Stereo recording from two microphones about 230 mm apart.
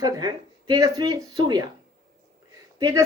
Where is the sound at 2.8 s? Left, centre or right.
Centre.